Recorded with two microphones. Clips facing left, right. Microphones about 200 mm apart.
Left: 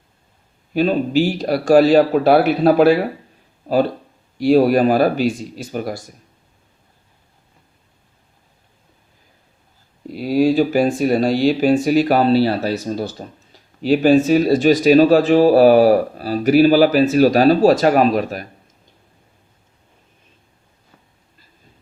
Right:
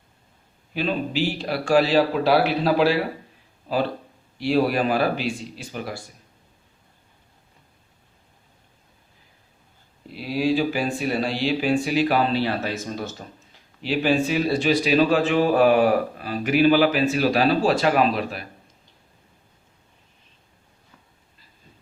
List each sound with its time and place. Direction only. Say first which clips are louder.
0.7 s a man's voice: left 8 dB; 45° left (ahead or behind)
4.4 s a man's voice: left 8 dB; 45° left (ahead or behind)
10.1 s speech: left 7 dB; 45° left (ahead or behind)